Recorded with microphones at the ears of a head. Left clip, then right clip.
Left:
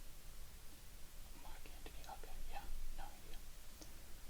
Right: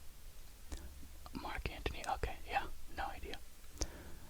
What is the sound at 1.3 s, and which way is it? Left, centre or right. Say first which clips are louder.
Whispering: right 17 dB; right.